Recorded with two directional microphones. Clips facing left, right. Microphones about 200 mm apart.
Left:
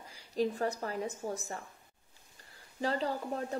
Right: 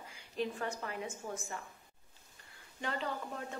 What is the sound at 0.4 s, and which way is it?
A woman's voice, 35° left (ahead or behind).